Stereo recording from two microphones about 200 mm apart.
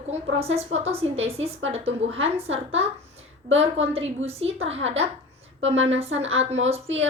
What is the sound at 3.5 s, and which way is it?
A woman's voice, 30° right (ahead or behind).